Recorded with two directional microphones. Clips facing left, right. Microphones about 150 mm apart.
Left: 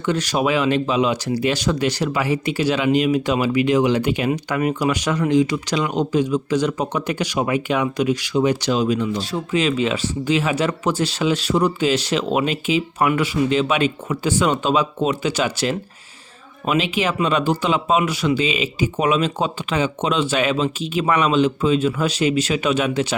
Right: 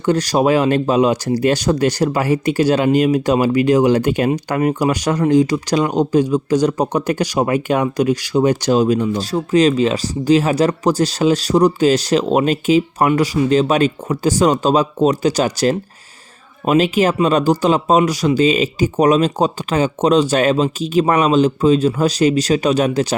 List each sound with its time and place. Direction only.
0.0 s speech: 40° right (ahead or behind)